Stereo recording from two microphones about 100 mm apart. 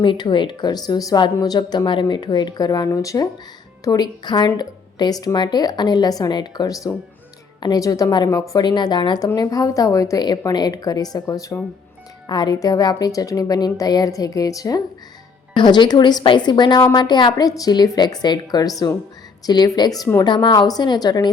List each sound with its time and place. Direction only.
0.0 s a woman's voice: 50° left (ahead or behind); by 8.6 s 35° left (ahead or behind)
8.6 s a woman's voice: 45° left (ahead or behind)
15.5 s a woman's voice: 50° left (ahead or behind)